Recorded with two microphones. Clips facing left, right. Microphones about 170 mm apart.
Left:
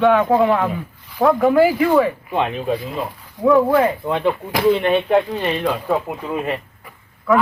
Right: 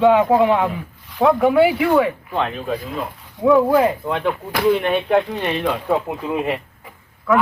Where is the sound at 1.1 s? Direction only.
Centre (ahead or behind).